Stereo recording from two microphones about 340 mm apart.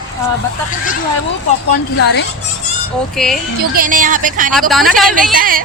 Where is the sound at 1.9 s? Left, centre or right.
Left.